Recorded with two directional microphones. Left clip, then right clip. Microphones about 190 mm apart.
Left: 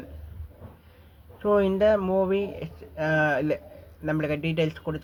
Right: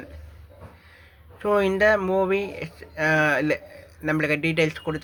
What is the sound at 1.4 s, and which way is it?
Speech, 20° right (ahead or behind).